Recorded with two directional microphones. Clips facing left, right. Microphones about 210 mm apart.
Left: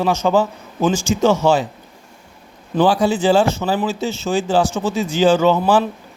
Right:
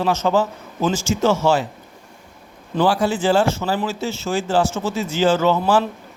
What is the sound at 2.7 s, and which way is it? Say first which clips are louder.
A man's voice: left 3 dB; 20° left (ahead or behind).